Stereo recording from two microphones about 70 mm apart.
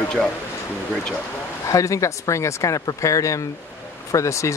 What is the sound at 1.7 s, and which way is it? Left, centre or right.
Speech, left.